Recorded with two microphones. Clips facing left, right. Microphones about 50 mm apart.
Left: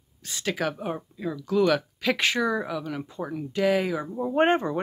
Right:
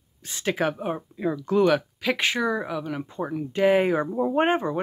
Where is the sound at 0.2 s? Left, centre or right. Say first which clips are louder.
Right 3 dB; centre.